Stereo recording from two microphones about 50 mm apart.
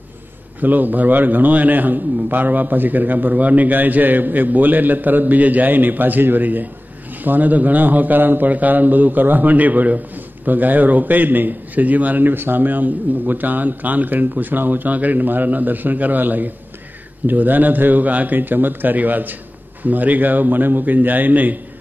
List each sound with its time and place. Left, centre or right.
0.6 s a man's voice: right